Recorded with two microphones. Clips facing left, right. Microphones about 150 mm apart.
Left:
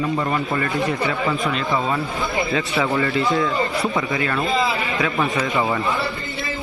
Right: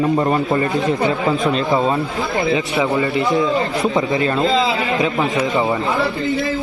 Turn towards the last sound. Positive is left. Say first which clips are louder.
# right 3 dB
turn(degrees=-20)  # may be behind; listen again after turning